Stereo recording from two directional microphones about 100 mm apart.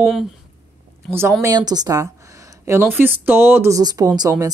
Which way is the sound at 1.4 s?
40° right (ahead or behind).